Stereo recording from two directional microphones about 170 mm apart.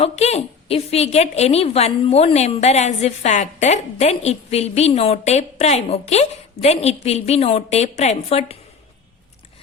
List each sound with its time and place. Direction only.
0.0 s a woman's voice: 40° left (ahead or behind)